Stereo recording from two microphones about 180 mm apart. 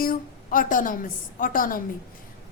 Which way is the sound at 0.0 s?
50° left (ahead or behind).